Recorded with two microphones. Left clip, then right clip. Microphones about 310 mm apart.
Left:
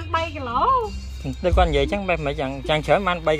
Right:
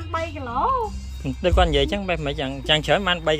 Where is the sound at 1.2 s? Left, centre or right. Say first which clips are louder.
Even; centre.